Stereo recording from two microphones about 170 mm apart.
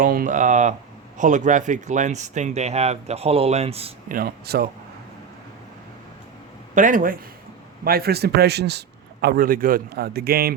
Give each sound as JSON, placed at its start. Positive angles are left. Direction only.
{"t": 0.0, "sound": "speech", "side_deg": -55}
{"t": 4.1, "sound": "a man's voice", "side_deg": -60}
{"t": 6.7, "sound": "speech", "side_deg": -50}
{"t": 7.9, "sound": "speech", "side_deg": -65}
{"t": 9.2, "sound": "a man's voice", "side_deg": -60}